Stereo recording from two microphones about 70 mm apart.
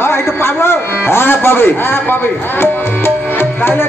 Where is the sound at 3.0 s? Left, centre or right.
Left.